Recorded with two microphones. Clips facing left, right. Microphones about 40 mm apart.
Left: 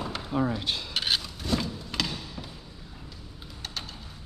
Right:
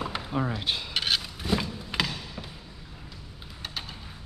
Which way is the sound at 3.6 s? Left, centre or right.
Centre.